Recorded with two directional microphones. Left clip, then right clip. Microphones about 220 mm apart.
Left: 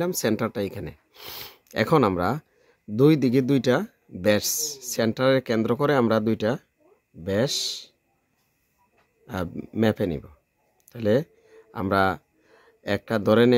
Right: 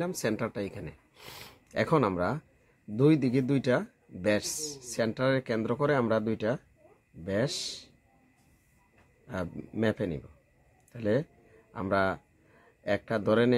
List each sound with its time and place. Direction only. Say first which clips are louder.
0.0 s speech: left 6 dB; 45° left (ahead or behind)
9.2 s speech: left 5 dB; 45° left (ahead or behind)